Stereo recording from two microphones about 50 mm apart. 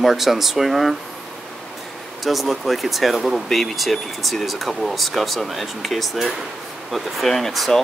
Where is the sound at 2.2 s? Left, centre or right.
Centre.